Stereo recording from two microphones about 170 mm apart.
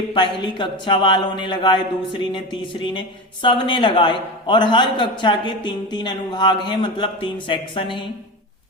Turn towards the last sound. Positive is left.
turn(degrees=30)  # may be behind; listen again after turning